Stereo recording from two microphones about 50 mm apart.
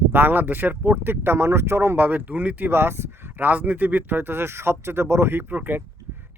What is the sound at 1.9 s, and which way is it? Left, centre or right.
Speech, right.